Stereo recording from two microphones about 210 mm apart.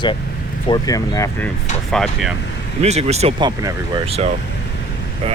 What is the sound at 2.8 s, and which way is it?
Speech, 30° right (ahead or behind).